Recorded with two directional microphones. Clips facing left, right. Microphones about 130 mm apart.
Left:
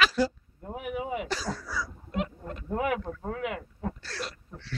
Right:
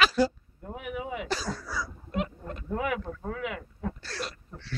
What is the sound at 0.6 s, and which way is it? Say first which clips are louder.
Speech: left 2 dB; 35° left (ahead or behind).